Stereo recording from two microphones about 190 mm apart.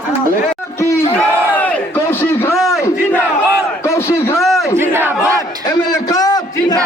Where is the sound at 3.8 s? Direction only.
15° left (ahead or behind).